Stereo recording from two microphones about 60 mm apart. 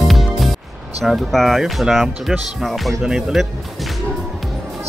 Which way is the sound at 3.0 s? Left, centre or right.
Centre.